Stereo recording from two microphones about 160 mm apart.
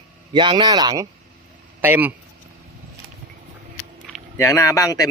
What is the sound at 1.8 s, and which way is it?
Speech, 10° right (ahead or behind).